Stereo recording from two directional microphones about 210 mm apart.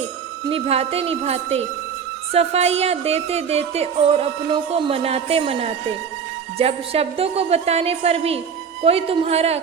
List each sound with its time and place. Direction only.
0.5 s music: 30° right (ahead or behind)